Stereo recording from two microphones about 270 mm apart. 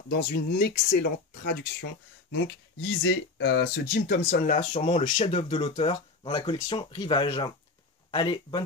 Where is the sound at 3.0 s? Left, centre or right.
Left; by 8.6 s centre.